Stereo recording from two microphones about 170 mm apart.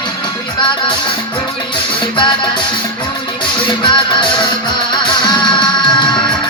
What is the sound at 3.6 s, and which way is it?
Music, 30° left (ahead or behind).